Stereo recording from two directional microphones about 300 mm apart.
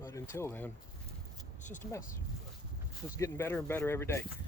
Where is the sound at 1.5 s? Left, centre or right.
Left.